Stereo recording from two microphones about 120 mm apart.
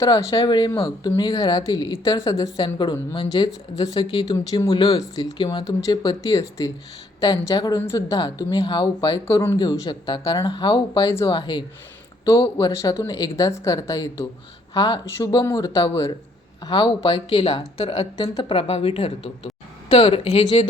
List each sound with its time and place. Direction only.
0.0 s speech: 30° left (ahead or behind)
5.6 s speech: 30° left (ahead or behind)
9.2 s speech: 20° left (ahead or behind)
9.6 s speech: 35° left (ahead or behind)
11.3 s speech: 40° left (ahead or behind)
12.5 s speech: 30° left (ahead or behind)
16.6 s speech: 35° left (ahead or behind); by 20.7 s 60° left (ahead or behind)